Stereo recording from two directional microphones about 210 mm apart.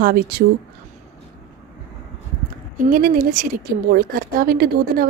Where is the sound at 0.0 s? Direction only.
45° right (ahead or behind).